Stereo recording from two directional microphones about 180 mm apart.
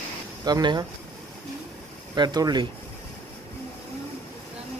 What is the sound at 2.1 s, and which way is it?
Speech, 25° right (ahead or behind).